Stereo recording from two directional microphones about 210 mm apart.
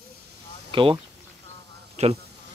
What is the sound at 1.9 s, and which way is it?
Insect, 30° right (ahead or behind).